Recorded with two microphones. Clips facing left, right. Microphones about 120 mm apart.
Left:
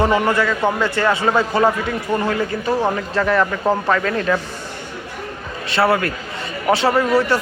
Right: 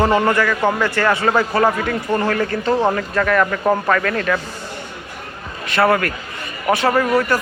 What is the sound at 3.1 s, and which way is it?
Speech, 30° left (ahead or behind).